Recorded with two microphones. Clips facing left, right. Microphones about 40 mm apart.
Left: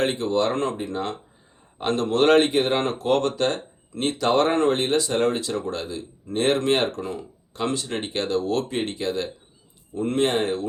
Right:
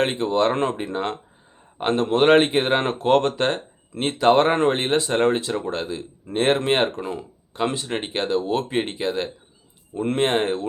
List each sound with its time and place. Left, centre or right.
0.0 s speech: right